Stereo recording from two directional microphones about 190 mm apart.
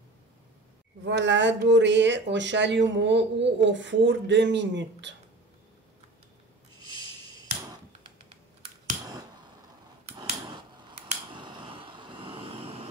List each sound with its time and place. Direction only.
1.0 s speech: 65° right (ahead or behind)
10.0 s a sound: 25° right (ahead or behind)
11.3 s vehicle: 25° right (ahead or behind)